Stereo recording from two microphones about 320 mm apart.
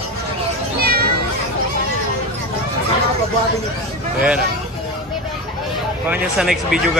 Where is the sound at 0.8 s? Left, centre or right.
Right.